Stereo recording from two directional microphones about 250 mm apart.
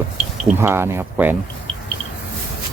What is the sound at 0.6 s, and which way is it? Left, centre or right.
Speech, centre.